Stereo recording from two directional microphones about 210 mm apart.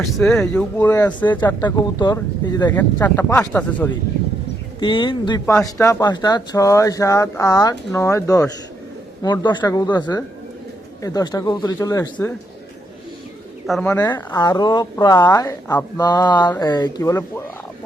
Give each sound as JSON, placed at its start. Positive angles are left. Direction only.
{"t": 0.0, "sound": "speech", "side_deg": 0}
{"t": 1.6, "sound": "a woman's voice", "side_deg": 20}
{"t": 4.8, "sound": "a woman's voice", "side_deg": 20}
{"t": 13.8, "sound": "a woman's voice", "side_deg": 15}